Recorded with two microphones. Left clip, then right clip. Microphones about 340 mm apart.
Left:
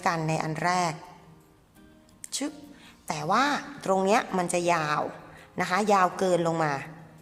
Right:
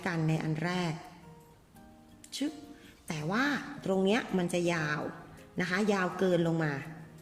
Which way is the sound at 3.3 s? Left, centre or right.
Centre.